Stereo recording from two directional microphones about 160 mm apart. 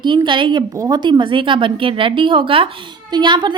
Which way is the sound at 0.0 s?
30° right (ahead or behind).